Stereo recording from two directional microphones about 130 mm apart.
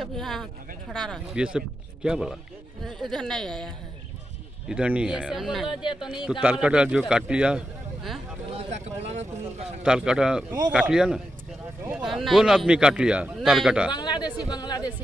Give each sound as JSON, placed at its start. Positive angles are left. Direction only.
{"t": 0.0, "sound": "a sound", "side_deg": 0}
{"t": 0.9, "sound": "a man's voice", "side_deg": 5}
{"t": 1.3, "sound": "a man's voice", "side_deg": -5}
{"t": 4.6, "sound": "a man's voice", "side_deg": -10}
{"t": 5.7, "sound": "speech", "side_deg": 35}
{"t": 6.4, "sound": "speech", "side_deg": -10}
{"t": 8.5, "sound": "a man's voice", "side_deg": -60}
{"t": 9.8, "sound": "a man's voice", "side_deg": -5}
{"t": 13.9, "sound": "speech", "side_deg": 35}